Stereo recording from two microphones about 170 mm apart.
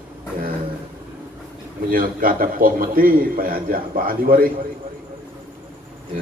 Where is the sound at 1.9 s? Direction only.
55° right (ahead or behind).